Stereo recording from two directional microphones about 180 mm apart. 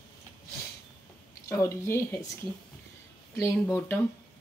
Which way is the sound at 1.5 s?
15° left (ahead or behind).